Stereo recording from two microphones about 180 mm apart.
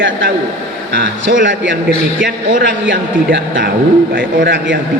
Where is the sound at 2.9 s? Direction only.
80° right.